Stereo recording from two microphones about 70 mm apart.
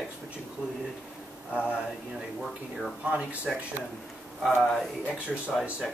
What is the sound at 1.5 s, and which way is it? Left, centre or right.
Speech, left.